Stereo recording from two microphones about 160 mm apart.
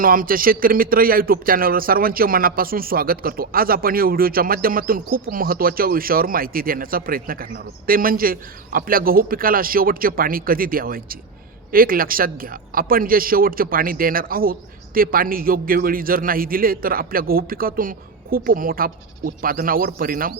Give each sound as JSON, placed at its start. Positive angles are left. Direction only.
{"t": 0.0, "sound": "speech", "side_deg": -60}